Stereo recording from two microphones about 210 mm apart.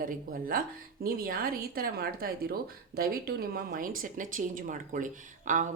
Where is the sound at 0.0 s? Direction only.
40° right (ahead or behind).